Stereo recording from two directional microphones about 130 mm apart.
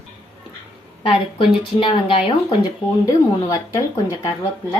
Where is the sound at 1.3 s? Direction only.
40° left (ahead or behind).